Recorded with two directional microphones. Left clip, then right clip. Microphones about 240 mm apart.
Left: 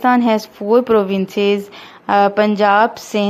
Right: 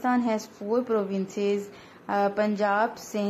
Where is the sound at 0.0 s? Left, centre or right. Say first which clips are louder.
Left 12 dB; left.